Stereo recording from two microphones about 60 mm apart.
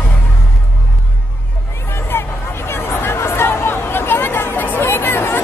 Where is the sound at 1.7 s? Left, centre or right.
Left.